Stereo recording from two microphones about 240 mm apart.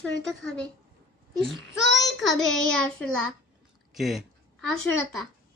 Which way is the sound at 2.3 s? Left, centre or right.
Centre.